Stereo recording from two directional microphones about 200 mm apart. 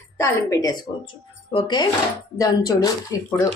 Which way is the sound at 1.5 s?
20° left (ahead or behind).